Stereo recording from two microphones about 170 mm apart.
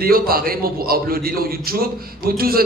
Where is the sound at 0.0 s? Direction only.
60° right (ahead or behind).